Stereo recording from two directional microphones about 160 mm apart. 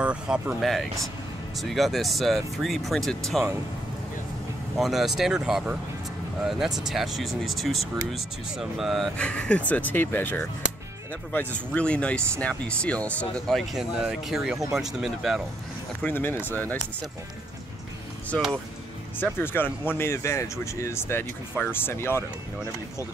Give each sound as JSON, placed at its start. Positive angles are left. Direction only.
{"t": 0.0, "sound": "speech", "side_deg": -5}
{"t": 4.7, "sound": "speech", "side_deg": 0}
{"t": 16.0, "sound": "speech", "side_deg": 10}
{"t": 19.1, "sound": "speech", "side_deg": 15}